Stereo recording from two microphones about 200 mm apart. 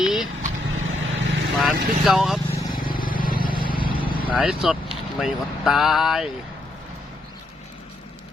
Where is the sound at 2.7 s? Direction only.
45° left (ahead or behind).